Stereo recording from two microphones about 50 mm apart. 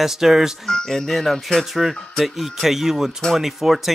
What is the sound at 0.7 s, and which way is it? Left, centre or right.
Speech, centre.